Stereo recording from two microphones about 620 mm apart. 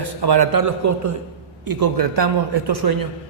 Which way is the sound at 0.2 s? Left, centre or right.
Right.